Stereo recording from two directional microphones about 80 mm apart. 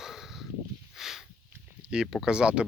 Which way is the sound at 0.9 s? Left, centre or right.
Centre.